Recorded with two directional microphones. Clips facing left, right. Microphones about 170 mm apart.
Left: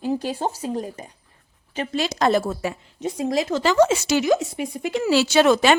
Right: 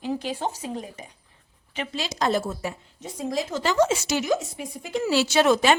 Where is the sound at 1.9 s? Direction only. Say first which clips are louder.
Left 5 dB; 60° left (ahead or behind).